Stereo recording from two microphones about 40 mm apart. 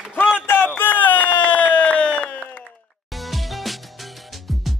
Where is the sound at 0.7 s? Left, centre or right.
Left.